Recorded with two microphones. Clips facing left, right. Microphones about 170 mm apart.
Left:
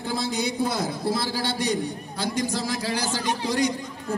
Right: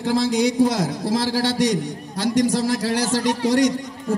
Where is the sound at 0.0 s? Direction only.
90° right.